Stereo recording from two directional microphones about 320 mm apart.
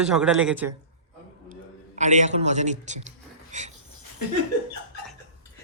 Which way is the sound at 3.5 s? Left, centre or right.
Right.